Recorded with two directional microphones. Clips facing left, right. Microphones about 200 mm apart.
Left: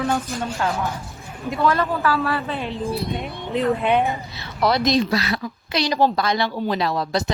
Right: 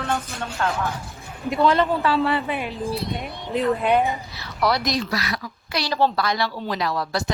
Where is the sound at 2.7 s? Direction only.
Centre (ahead or behind).